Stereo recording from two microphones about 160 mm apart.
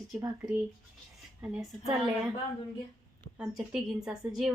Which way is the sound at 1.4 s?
5° right (ahead or behind).